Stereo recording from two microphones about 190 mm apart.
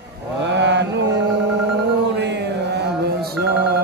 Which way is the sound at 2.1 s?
65° right (ahead or behind).